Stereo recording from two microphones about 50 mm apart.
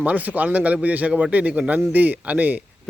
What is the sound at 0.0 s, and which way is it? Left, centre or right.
A man's voice, right.